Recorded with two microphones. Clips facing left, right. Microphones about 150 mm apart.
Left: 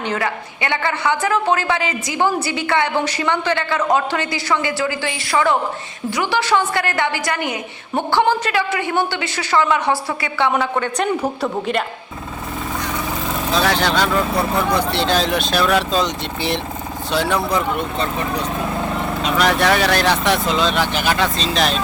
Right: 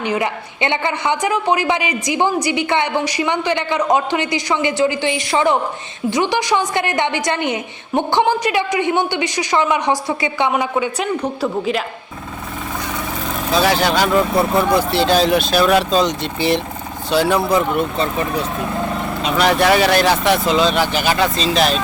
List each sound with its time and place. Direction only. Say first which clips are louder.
0.0 s a woman's voice: right 2 dB; 15° right (ahead or behind); by 11.8 s centre (ahead or behind)
13.5 s speech: right 3 dB; 5° right (ahead or behind)